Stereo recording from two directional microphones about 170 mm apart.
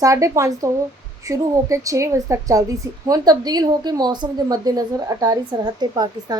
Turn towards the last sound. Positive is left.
turn(degrees=-25)  # may be behind; listen again after turning